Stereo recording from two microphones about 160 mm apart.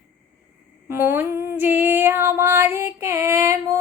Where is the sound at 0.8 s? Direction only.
15° right (ahead or behind).